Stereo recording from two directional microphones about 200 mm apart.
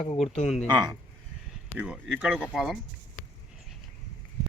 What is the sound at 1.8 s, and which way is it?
Speech, 5° right (ahead or behind).